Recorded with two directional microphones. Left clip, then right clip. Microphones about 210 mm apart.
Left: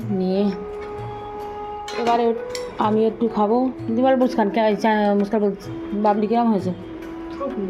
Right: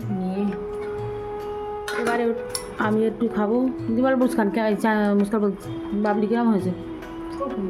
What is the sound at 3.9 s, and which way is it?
Speech, 15° right (ahead or behind).